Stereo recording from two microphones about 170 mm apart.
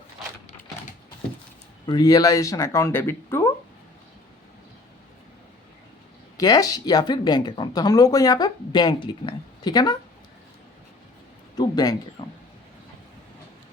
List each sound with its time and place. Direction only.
1.9 s speech: 20° left (ahead or behind)
6.4 s speech: 20° left (ahead or behind)
11.5 s a sound: 25° left (ahead or behind)
12.2 s speech: 30° left (ahead or behind)